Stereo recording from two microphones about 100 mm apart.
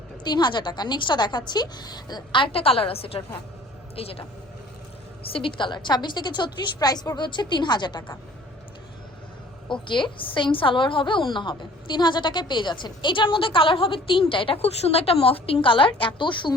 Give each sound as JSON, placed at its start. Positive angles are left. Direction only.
{"t": 0.3, "sound": "a woman's voice", "side_deg": 45}
{"t": 5.2, "sound": "a woman's voice", "side_deg": 65}
{"t": 9.8, "sound": "a woman's voice", "side_deg": 55}